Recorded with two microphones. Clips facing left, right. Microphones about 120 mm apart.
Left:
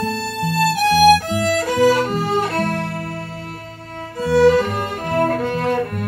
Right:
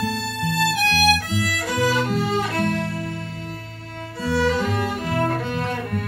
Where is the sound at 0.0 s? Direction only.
45° left (ahead or behind).